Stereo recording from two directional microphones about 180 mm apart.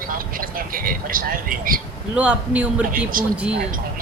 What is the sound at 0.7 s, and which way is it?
Speech, 50° right (ahead or behind).